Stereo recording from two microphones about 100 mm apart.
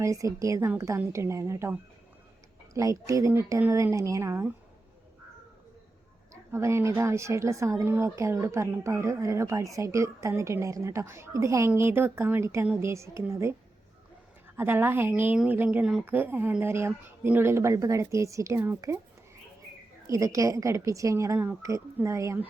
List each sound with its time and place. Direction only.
0.0 s a woman's voice: 30° right (ahead or behind)
2.7 s a woman's voice: 30° right (ahead or behind)
6.3 s a woman's voice: 25° right (ahead or behind)
14.5 s a woman's voice: 20° right (ahead or behind)
20.1 s a woman's voice: 30° right (ahead or behind)